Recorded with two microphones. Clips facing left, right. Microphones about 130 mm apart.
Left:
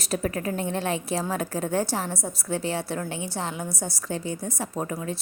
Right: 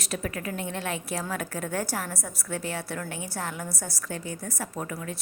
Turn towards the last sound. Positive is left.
turn(degrees=25)  # may be behind; listen again after turning